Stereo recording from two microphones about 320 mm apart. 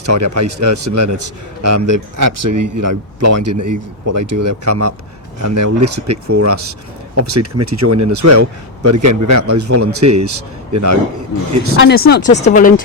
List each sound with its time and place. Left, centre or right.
0.2 s speech: right
4.6 s speech: right
5.4 s speech: right
5.8 s speech: right
11.8 s speech: left